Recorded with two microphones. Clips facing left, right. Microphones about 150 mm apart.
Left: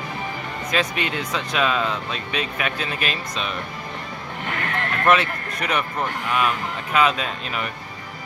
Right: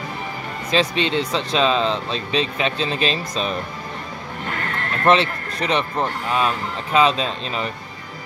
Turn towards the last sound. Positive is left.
turn(degrees=-30)  # may be behind; listen again after turning